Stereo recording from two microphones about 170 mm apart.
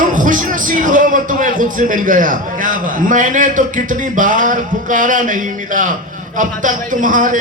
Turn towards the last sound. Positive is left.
turn(degrees=-50)  # may be behind; listen again after turning